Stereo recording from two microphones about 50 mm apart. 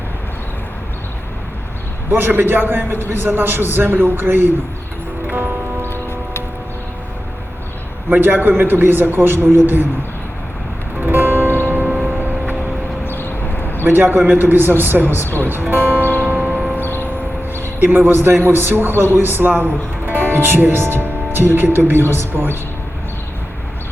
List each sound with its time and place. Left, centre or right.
2.0 s a man's voice: right
5.3 s music: right
5.9 s a sound: left
8.1 s a man's voice: right
11.0 s music: right
11.7 s music: right
11.9 s a sound: centre
13.1 s a sound: left
13.8 s a man's voice: right
15.4 s music: right
17.5 s a man's voice: right